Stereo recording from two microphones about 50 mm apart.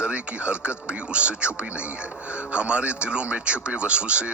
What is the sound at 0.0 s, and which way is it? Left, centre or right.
Speech, right.